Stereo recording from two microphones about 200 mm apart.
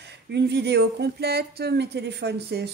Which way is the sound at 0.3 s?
55° right (ahead or behind).